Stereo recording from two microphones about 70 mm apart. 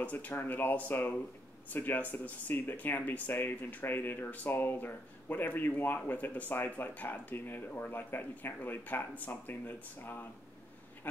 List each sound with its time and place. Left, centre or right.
0.0 s speech: left